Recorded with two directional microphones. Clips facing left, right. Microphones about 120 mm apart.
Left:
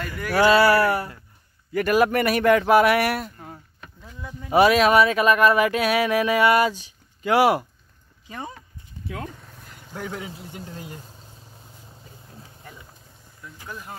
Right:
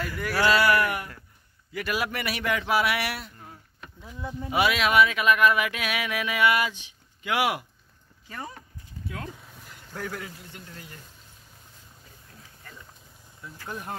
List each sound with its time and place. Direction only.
0.3 s speech: 25° left (ahead or behind)
1.7 s speech: 50° left (ahead or behind)
4.2 s speech: 25° right (ahead or behind)
4.5 s speech: 40° left (ahead or behind)
8.3 s speech: 20° left (ahead or behind)
9.3 s a sound: 5° right (ahead or behind)
10.3 s speech: 30° left (ahead or behind)
12.3 s a sound: 30° left (ahead or behind)
13.4 s vehicle: 25° right (ahead or behind)